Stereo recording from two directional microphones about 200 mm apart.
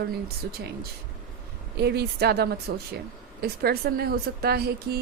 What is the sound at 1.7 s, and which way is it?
A woman's voice, 55° right (ahead or behind).